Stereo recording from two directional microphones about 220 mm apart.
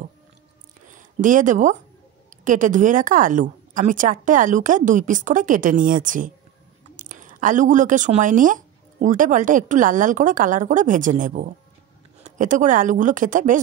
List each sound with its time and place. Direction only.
0.8 s speech: 35° right (ahead or behind)